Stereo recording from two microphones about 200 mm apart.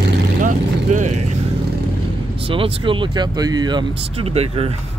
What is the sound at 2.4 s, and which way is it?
Speech, 25° right (ahead or behind).